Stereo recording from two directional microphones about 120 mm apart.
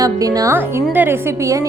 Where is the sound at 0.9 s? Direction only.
15° right (ahead or behind).